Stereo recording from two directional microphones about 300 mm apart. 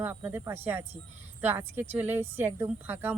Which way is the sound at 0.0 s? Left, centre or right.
Centre.